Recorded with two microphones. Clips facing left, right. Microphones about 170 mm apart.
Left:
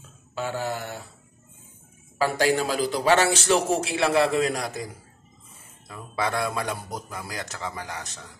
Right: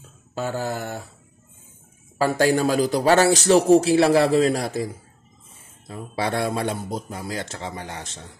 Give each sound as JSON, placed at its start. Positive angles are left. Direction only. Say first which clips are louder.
{"t": 0.3, "sound": "a man's voice", "louder": "right 2 dB", "side_deg": -40}
{"t": 2.3, "sound": "a man's voice", "louder": "right 5 dB", "side_deg": -45}